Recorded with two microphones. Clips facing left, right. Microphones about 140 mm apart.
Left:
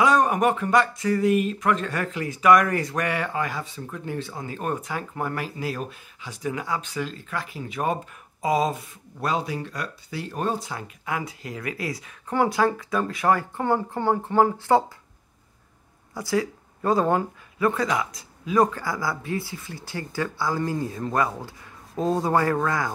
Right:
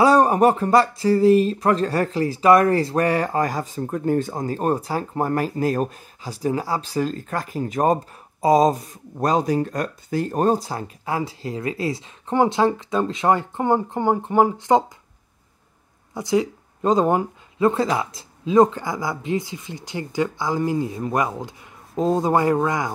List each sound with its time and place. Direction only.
0.0 s speech: 35° right (ahead or behind); by 14.9 s 15° right (ahead or behind)
16.1 s speech: 20° right (ahead or behind)